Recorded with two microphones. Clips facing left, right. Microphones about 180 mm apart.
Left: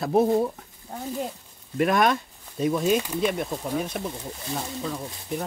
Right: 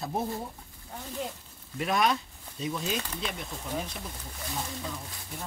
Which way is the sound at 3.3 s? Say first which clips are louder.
Left 9 dB; 55° left (ahead or behind).